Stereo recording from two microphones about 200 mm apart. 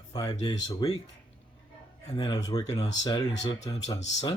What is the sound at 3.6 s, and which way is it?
Speech, 35° left (ahead or behind).